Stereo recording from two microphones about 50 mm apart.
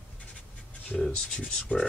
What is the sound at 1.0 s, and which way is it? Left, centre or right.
Speech, centre.